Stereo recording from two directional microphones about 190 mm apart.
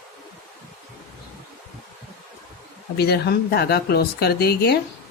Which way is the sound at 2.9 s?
60° left (ahead or behind).